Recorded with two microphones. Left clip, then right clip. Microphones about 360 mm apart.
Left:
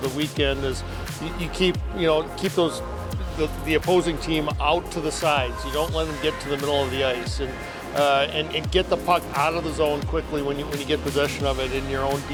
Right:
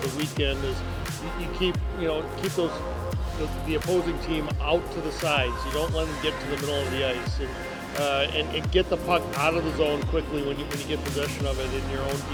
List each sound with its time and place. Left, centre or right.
0.2 s speech: left
1.5 s speech: left
3.7 s speech: left